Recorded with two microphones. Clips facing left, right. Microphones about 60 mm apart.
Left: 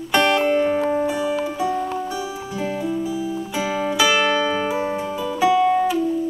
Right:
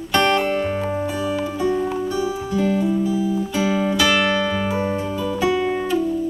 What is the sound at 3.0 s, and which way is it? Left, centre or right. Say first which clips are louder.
Music: right 4 dB; centre.